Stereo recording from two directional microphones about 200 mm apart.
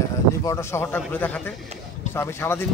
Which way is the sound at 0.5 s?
15° left (ahead or behind).